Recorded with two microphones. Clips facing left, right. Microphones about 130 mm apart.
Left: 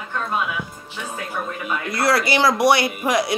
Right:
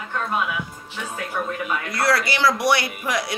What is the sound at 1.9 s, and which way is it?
A woman's voice, 25° left (ahead or behind).